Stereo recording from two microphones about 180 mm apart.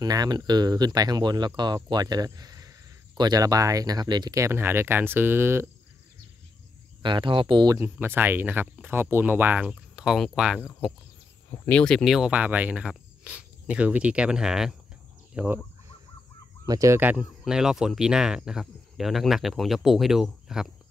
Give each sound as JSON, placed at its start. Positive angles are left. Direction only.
{"t": 0.0, "sound": "speech", "side_deg": -20}
{"t": 7.0, "sound": "speech", "side_deg": -25}
{"t": 11.6, "sound": "speech", "side_deg": 5}
{"t": 16.6, "sound": "speech", "side_deg": -20}